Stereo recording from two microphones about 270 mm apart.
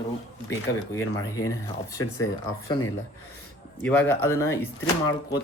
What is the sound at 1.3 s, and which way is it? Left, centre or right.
Speech, centre.